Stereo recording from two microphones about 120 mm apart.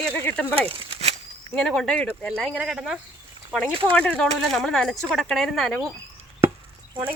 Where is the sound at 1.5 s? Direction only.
5° left (ahead or behind).